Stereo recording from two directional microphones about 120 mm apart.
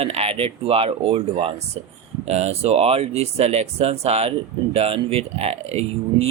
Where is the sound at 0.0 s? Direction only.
55° right (ahead or behind).